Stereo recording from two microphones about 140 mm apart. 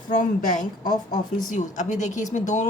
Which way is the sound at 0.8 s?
30° left (ahead or behind).